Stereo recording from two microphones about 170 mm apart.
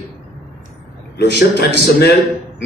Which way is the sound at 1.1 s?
75° left (ahead or behind).